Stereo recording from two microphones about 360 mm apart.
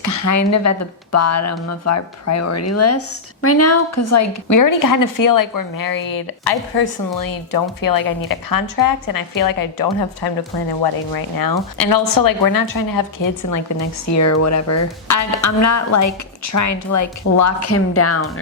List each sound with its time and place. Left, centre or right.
0.0 s a woman's voice: left